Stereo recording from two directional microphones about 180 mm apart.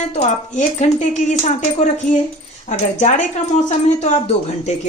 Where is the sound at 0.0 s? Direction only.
40° left (ahead or behind).